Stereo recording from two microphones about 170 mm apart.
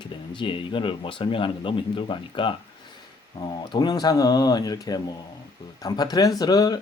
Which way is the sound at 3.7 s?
25° left (ahead or behind).